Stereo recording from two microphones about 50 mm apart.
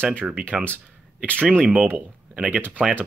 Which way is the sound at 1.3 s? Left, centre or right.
Right.